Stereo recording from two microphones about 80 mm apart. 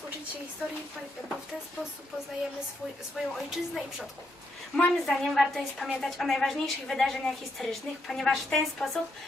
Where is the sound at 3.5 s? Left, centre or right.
Centre.